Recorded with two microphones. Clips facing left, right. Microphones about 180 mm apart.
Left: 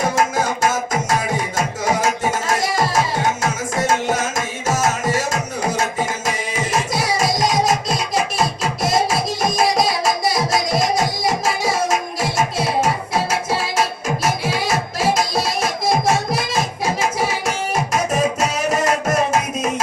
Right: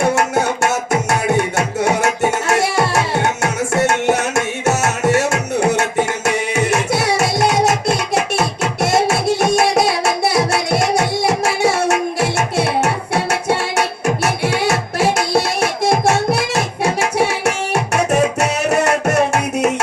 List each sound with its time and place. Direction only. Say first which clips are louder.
0.0 s music: right 3 dB; 70° right (ahead or behind)